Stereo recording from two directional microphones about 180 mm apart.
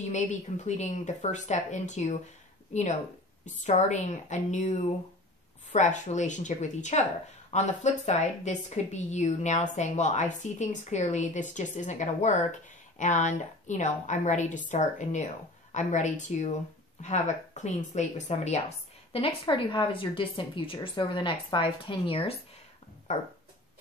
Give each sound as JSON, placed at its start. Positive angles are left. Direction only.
{"t": 0.0, "sound": "a woman's voice", "side_deg": 40}
{"t": 3.4, "sound": "a woman's voice", "side_deg": 40}